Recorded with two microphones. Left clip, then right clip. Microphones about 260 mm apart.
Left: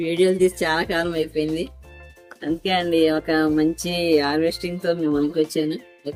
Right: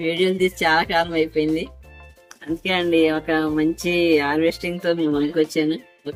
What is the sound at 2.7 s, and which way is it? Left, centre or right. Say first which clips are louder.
Speech: right 1 dB; centre.